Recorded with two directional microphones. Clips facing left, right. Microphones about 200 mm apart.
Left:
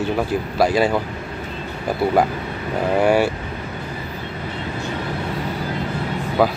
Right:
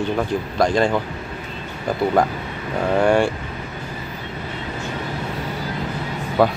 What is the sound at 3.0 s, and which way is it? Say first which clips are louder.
Speech: even; 5° left (ahead or behind).